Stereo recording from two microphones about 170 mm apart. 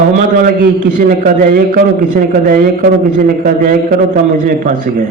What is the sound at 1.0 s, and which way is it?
A man's voice, 55° right (ahead or behind).